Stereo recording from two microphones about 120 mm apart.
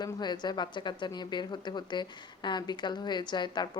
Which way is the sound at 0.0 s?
35° left (ahead or behind).